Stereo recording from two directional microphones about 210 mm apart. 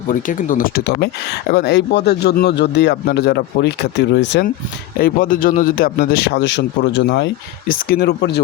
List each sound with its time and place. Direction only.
0.1 s speech: 40° left (ahead or behind); by 4.4 s 55° left (ahead or behind)
4.9 s speech: 40° left (ahead or behind); by 7.3 s 60° left (ahead or behind)
7.7 s speech: 45° left (ahead or behind)